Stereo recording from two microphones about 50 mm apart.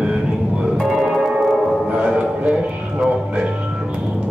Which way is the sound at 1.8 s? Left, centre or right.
Right.